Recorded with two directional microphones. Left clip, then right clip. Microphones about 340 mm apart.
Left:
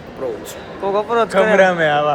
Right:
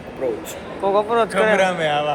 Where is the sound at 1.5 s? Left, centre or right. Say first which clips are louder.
Left 5 dB; left.